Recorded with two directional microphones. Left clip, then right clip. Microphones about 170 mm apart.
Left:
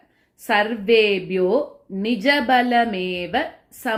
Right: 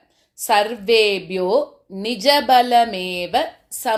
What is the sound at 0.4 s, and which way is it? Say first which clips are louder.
Speech: right 2 dB; 30° right (ahead or behind).